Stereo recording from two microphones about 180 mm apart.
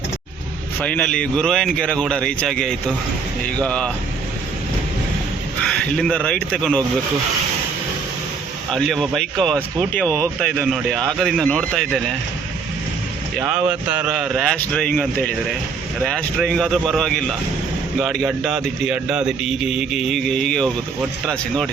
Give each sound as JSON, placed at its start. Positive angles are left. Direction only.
{"t": 0.8, "sound": "speech", "side_deg": 5}
{"t": 5.6, "sound": "speech", "side_deg": 5}
{"t": 8.7, "sound": "speech", "side_deg": 0}
{"t": 13.4, "sound": "speech", "side_deg": -10}